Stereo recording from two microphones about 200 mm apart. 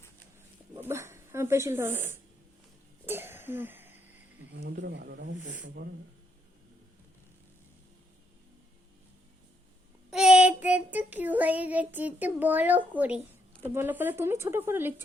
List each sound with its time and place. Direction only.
0.8 s speech: 10° right (ahead or behind)
3.1 s throat clearing: 10° right (ahead or behind)
4.5 s speech: 55° right (ahead or behind)
10.1 s child singing: 5° right (ahead or behind)